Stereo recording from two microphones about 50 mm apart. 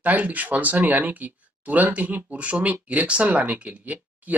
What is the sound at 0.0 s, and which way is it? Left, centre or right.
Speech, right.